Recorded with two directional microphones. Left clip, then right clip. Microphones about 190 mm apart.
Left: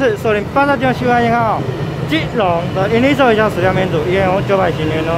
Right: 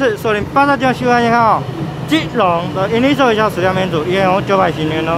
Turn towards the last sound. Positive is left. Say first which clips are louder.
# right 1 dB
turn(degrees=-15)  # may be behind; listen again after turning